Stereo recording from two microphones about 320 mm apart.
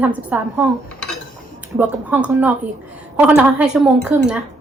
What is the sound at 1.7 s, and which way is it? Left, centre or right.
A woman's voice, centre.